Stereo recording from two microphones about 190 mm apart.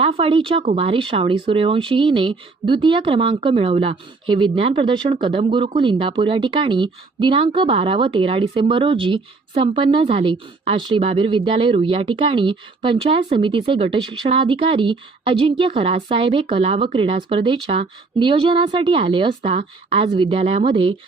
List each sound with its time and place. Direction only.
0.0 s speech: 30° right (ahead or behind)